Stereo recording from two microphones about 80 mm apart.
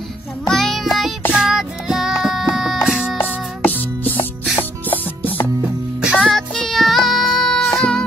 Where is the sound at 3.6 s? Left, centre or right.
Left.